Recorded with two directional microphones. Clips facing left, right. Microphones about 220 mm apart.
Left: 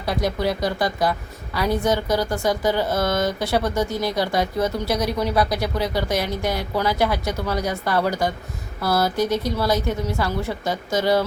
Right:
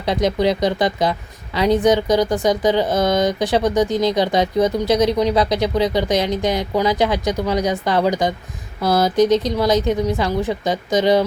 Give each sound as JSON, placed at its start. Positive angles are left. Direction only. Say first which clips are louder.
{"t": 0.0, "sound": "speech", "louder": "right 5 dB", "side_deg": -20}